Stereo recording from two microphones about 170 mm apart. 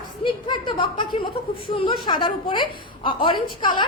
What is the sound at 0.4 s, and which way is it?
A woman's voice, 30° left (ahead or behind).